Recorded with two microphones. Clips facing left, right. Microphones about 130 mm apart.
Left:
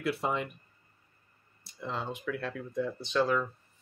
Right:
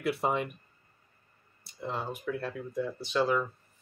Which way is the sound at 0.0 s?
60° right (ahead or behind).